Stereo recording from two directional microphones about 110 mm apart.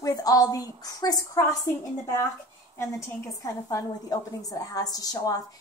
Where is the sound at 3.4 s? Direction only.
30° left (ahead or behind).